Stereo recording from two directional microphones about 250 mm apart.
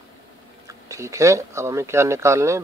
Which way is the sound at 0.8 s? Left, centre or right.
Centre.